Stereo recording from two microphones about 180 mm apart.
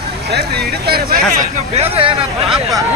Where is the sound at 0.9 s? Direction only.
60° right (ahead or behind).